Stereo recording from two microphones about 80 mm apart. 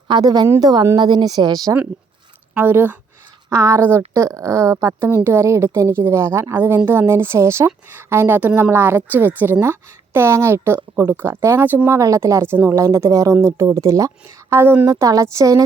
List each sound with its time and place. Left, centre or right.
0.1 s speech: right
2.6 s speech: right
3.5 s a woman's voice: right
11.9 s a woman's voice: right
14.5 s speech: right
14.8 s a woman's voice: right